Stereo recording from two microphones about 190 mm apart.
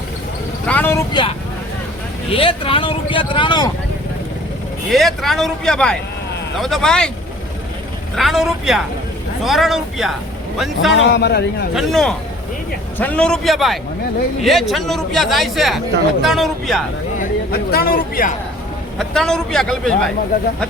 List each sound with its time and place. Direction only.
0.7 s speech: 10° left (ahead or behind)
1.1 s speech: 25° left (ahead or behind)
4.9 s a man's voice: centre (ahead or behind)
8.1 s a man's voice: centre (ahead or behind)
10.9 s a man's voice: 65° left (ahead or behind)
11.7 s a man's voice: centre (ahead or behind)
17.2 s speech: 55° left (ahead or behind)
18.9 s a man's voice: 5° left (ahead or behind)